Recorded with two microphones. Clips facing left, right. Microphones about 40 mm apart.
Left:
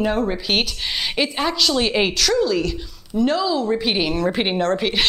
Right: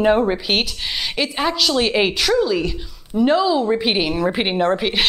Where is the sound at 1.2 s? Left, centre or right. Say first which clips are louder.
Right 1 dB; centre.